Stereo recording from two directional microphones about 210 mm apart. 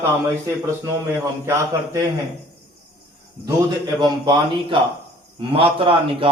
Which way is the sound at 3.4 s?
20° right (ahead or behind).